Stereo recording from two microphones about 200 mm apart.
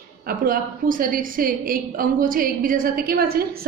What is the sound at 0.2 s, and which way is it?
A woman's voice, 45° right (ahead or behind).